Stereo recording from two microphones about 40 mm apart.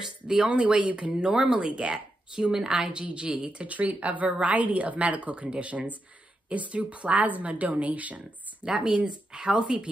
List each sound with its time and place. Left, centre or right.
0.0 s speech: centre
0.5 s speech: right
3.0 s speech: right
8.6 s speech: centre